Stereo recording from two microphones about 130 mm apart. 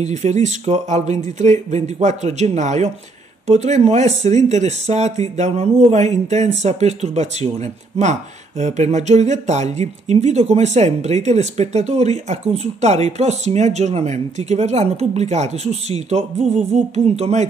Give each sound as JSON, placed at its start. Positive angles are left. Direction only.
{"t": 0.0, "sound": "speech", "side_deg": -60}